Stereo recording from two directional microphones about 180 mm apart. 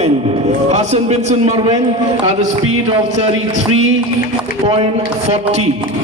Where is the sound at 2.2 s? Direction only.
35° right (ahead or behind).